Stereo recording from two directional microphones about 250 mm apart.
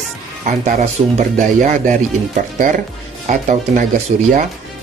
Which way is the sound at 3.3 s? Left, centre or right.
Right.